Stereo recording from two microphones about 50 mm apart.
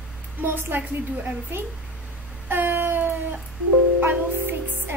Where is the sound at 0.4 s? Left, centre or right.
Right.